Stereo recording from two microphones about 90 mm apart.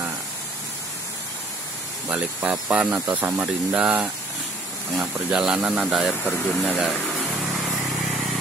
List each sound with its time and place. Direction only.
2.0 s speech: 10° right (ahead or behind)
6.2 s speech: 15° left (ahead or behind)
6.8 s a sound: centre (ahead or behind)